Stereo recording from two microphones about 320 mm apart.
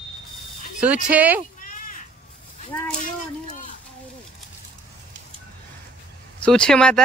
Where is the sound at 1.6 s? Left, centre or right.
Left.